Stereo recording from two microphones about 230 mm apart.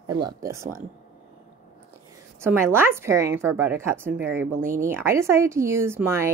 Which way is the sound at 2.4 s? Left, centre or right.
Centre.